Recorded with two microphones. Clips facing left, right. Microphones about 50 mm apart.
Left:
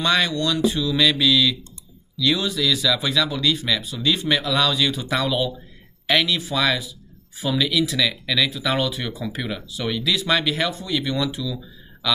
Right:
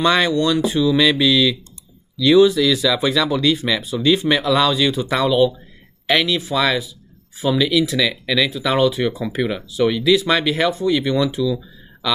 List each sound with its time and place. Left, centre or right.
0.0 s speech: centre